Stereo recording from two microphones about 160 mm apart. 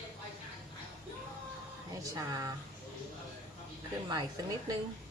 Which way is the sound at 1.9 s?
20° right (ahead or behind).